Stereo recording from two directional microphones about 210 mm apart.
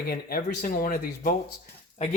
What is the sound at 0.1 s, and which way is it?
Speech, 45° left (ahead or behind).